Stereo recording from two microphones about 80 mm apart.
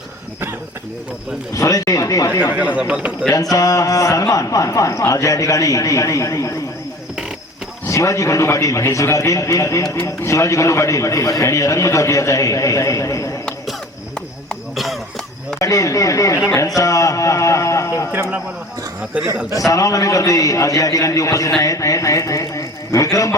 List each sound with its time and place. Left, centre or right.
1.5 s a man's voice: left
2.7 s a man's voice: centre
3.5 s a man's voice: left
7.9 s a man's voice: left
14.5 s cough: centre
15.5 s a man's voice: left
19.1 s a man's voice: centre
19.5 s a man's voice: left